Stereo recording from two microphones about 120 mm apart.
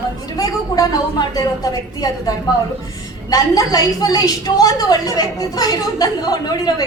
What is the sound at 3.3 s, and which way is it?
Speech, 30° left (ahead or behind).